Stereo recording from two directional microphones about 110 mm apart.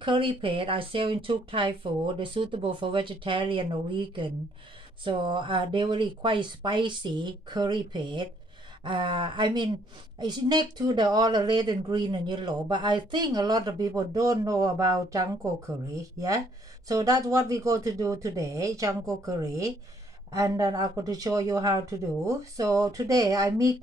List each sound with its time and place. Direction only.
0.0 s speech: 50° right (ahead or behind); by 23.8 s 30° right (ahead or behind)